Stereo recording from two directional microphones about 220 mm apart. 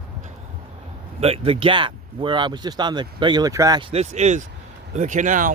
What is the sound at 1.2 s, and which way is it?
Speech, 25° right (ahead or behind).